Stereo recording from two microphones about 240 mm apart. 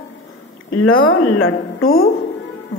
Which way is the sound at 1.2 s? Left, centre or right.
Left.